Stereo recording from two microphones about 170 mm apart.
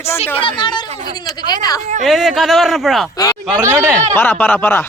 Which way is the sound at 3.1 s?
20° left (ahead or behind).